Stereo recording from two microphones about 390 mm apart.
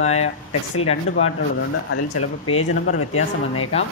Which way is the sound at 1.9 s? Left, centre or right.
Left.